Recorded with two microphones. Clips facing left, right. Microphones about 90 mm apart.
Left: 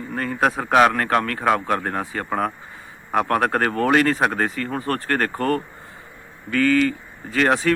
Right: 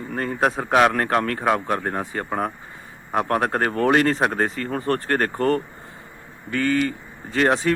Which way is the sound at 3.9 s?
35° right (ahead or behind).